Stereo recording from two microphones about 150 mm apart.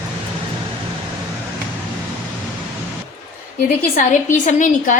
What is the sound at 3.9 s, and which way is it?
A woman's voice, 60° left (ahead or behind).